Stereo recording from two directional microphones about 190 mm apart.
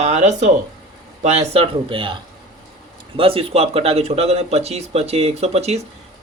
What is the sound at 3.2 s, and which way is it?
Speech, 30° right (ahead or behind).